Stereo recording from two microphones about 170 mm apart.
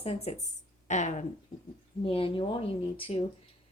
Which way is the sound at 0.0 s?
35° left (ahead or behind).